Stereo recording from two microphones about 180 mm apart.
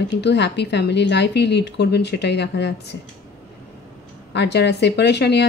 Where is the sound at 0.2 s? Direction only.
70° left (ahead or behind).